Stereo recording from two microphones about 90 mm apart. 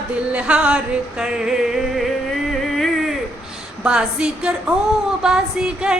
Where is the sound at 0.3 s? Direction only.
15° right (ahead or behind).